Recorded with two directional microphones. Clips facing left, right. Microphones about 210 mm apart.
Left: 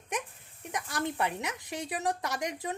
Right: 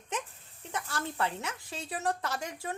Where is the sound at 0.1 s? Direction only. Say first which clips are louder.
Left 1 dB; 15° left (ahead or behind).